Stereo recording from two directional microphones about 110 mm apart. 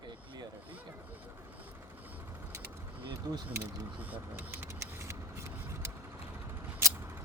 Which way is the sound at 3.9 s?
15° right (ahead or behind).